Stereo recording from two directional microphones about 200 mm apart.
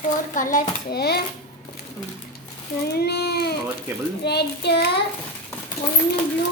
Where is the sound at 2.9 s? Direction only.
55° left (ahead or behind).